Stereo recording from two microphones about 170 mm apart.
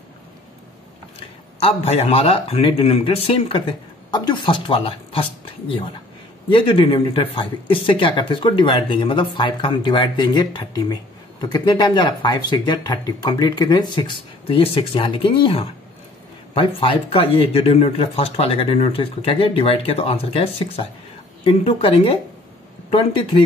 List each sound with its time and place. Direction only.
1.6 s speech: 35° left (ahead or behind)
6.5 s speech: 30° left (ahead or behind)